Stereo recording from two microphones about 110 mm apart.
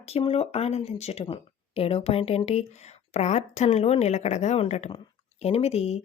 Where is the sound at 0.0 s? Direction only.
65° left (ahead or behind); by 4.9 s 85° left.